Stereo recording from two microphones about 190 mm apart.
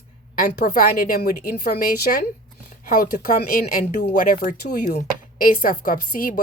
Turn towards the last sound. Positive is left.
turn(degrees=45)  # may be behind; listen again after turning